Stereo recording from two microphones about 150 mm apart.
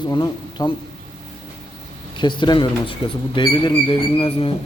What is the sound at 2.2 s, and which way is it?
Speech, 30° left (ahead or behind).